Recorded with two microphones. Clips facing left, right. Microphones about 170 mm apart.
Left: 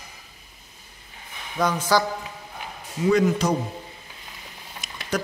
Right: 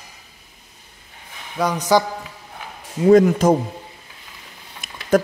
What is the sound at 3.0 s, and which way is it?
Speech, 50° right (ahead or behind).